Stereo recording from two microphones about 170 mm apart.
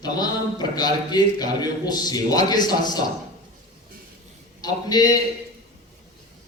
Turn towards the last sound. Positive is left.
turn(degrees=25)  # may be behind; listen again after turning